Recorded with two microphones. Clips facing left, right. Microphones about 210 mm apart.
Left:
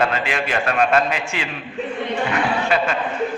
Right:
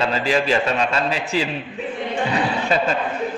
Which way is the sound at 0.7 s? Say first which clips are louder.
Left 3 dB; 60° left (ahead or behind).